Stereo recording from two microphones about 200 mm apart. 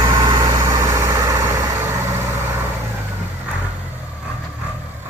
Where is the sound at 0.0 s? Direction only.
20° right (ahead or behind).